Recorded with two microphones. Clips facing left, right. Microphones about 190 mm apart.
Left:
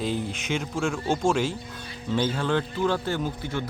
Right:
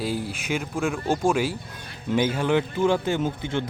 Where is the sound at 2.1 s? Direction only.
15° right (ahead or behind).